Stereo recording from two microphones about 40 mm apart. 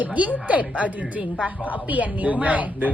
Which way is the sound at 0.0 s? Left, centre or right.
Right.